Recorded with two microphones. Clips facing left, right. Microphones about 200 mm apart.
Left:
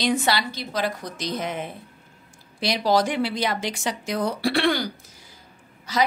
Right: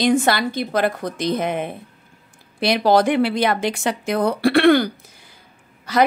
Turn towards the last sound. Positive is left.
turn(degrees=-60)  # may be behind; listen again after turning